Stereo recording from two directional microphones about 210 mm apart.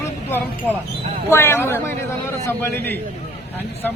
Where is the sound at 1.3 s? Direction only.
10° left (ahead or behind).